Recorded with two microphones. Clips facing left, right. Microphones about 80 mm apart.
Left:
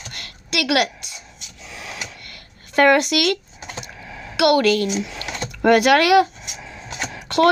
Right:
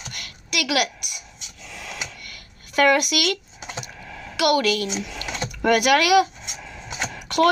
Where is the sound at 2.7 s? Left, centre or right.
Left.